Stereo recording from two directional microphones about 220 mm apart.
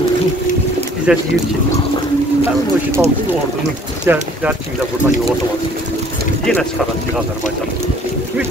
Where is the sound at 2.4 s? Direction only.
10° right (ahead or behind).